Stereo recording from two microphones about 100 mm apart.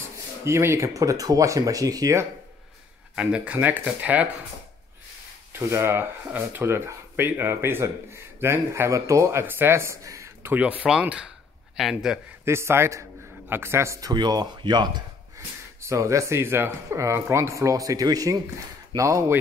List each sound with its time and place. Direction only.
0.5 s speech: 25° right (ahead or behind)
3.2 s speech: 10° right (ahead or behind)
5.5 s speech: 25° right (ahead or behind)
10.5 s speech: 15° right (ahead or behind)
12.4 s speech: 25° right (ahead or behind)
14.1 s speech: 45° right (ahead or behind)
15.3 s speech: 30° right (ahead or behind)